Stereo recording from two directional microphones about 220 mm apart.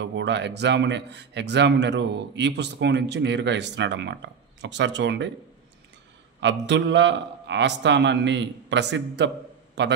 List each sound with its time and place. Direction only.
0.0 s a man's voice: 55° right (ahead or behind)
6.4 s a man's voice: 50° right (ahead or behind)